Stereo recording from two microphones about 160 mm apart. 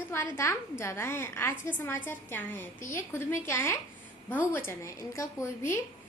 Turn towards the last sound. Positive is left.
turn(degrees=20)  # may be behind; listen again after turning